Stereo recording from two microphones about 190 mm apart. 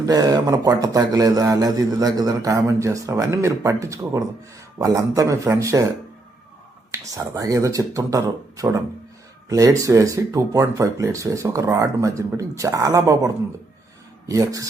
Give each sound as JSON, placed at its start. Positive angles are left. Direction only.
{"t": 0.0, "sound": "a man's voice", "side_deg": -20}
{"t": 6.9, "sound": "a man's voice", "side_deg": -20}